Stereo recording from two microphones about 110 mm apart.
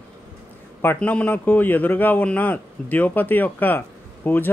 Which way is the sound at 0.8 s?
15° left (ahead or behind).